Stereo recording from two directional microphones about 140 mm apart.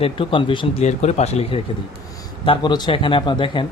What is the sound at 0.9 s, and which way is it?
Speech, 55° left (ahead or behind).